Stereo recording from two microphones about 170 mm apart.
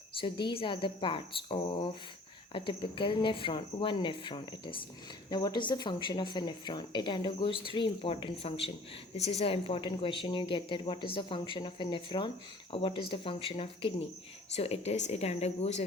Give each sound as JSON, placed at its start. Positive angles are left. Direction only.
{"t": 0.2, "sound": "speech", "side_deg": 30}